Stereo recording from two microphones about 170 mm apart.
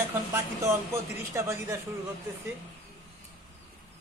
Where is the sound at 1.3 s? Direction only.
15° right (ahead or behind).